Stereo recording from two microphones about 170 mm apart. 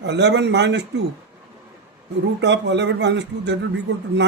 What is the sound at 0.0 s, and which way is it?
A man's voice, 85° right.